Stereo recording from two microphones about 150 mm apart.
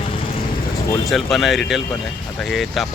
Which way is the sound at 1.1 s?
Centre (ahead or behind).